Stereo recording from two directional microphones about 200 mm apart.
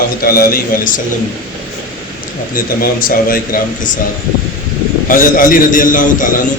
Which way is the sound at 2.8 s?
45° left (ahead or behind).